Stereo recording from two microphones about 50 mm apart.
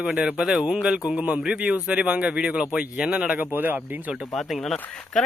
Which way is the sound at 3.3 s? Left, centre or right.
Right.